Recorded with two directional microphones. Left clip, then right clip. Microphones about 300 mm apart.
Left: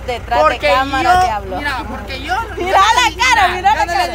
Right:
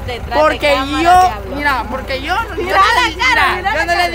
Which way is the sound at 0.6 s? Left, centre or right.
Right.